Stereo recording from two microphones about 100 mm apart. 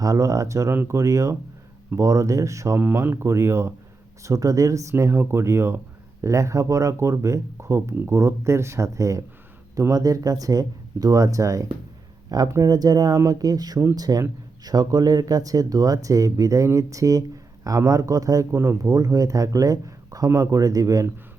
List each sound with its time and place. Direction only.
0.0 s speech: 35° right (ahead or behind)